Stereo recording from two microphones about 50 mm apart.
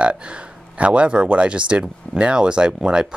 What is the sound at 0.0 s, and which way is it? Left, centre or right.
Speech, right.